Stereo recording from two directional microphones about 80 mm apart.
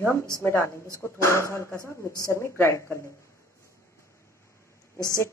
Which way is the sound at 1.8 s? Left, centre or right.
Right.